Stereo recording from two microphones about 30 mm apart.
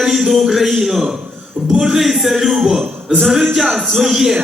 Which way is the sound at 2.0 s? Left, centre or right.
Centre.